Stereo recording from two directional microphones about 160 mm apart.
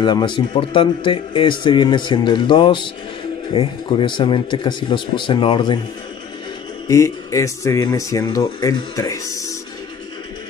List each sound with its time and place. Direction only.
0.0 s a man's voice: 30° left (ahead or behind)
6.9 s a man's voice: 20° left (ahead or behind)